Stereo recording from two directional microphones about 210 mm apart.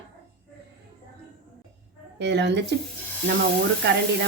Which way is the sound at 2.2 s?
55° right (ahead or behind).